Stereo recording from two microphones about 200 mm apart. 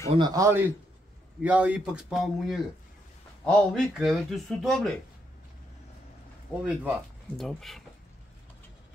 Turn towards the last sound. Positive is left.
turn(degrees=0)  # may be behind; listen again after turning